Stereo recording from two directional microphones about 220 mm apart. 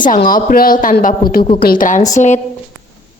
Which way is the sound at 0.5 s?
40° left (ahead or behind).